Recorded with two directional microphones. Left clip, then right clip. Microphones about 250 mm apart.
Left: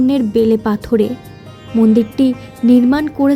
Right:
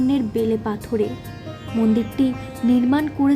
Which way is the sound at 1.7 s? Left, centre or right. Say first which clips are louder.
Left 8 dB; centre.